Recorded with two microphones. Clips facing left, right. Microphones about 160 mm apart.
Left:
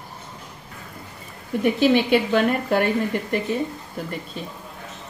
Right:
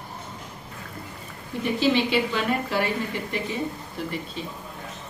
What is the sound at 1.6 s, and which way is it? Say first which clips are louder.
Speech: left 4 dB; 55° left (ahead or behind).